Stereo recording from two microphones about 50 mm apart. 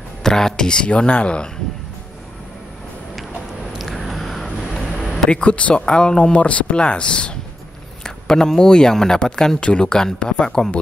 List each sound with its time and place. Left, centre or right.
0.2 s speech: centre
3.7 s a sound: centre
4.6 s vehicle: centre
5.1 s speech: centre